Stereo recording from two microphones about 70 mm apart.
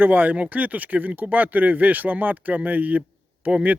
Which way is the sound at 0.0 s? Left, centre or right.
Right.